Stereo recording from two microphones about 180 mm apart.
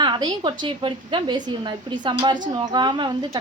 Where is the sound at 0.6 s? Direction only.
25° right (ahead or behind).